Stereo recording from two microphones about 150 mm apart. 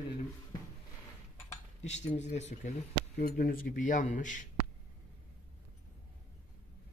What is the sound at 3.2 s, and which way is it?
A man's voice, 85° left.